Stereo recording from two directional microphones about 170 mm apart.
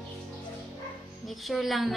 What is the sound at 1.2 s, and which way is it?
Speech, centre (ahead or behind).